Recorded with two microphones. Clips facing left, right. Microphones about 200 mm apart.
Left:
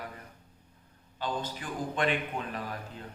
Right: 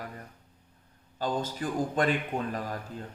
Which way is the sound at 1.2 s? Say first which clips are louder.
Right 4 dB; 45° right (ahead or behind).